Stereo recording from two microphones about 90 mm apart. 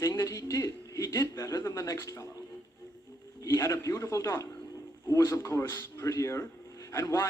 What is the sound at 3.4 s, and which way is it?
A man's voice, 35° left (ahead or behind).